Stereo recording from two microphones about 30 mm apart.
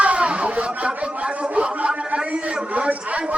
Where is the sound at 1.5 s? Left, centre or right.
Right.